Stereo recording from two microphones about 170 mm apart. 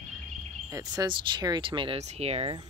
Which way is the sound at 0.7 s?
20° right (ahead or behind).